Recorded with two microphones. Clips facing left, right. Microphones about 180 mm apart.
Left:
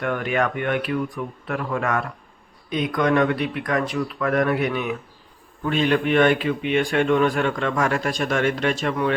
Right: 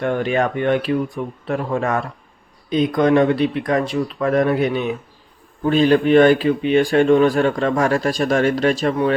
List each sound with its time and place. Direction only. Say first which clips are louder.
0.0 s speech: right 4 dB; 30° right (ahead or behind)